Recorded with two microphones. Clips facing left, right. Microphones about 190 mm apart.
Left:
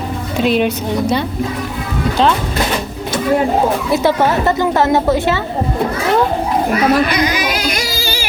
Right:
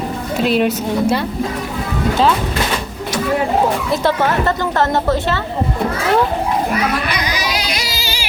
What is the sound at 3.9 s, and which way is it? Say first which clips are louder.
A woman's voice: left 3 dB; 10° left (ahead or behind).